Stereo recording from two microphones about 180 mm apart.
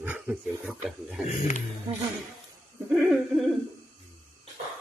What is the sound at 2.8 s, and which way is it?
Hoot, centre (ahead or behind).